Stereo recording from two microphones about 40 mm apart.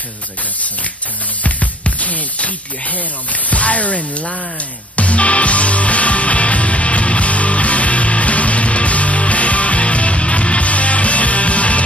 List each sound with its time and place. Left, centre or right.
1.4 s music: left
3.4 s speech: left
4.9 s music: left